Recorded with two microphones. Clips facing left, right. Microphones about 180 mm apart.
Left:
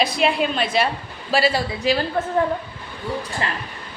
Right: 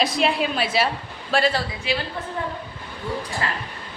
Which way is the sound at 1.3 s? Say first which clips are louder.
Left 2 dB; 5° left (ahead or behind).